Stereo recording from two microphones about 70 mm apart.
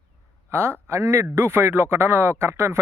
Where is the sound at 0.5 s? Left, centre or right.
Right.